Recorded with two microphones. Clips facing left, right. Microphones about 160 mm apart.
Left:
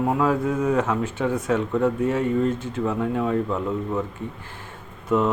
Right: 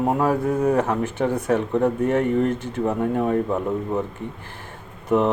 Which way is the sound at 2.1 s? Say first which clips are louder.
Right 2 dB; 60° right (ahead or behind).